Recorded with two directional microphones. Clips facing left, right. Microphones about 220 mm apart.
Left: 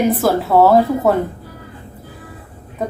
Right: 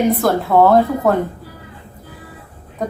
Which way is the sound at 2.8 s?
5° left (ahead or behind).